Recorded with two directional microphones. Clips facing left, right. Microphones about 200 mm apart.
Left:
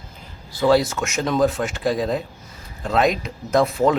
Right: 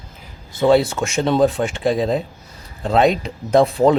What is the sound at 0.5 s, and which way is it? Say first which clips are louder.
A man's voice: right 3 dB; 25° right (ahead or behind).